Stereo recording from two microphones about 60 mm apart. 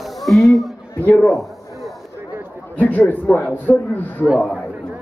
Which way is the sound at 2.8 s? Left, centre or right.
Left.